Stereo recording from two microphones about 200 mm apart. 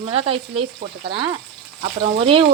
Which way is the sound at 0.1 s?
25° right (ahead or behind).